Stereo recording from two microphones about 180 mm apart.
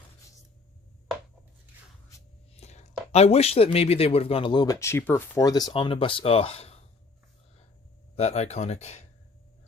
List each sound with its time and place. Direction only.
2.6 s speech: 40° left (ahead or behind)
8.1 s speech: 35° left (ahead or behind)